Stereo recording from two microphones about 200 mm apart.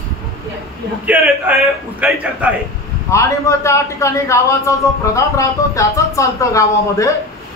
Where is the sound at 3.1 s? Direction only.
15° left (ahead or behind).